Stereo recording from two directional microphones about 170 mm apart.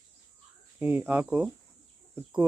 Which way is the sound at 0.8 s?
10° right (ahead or behind).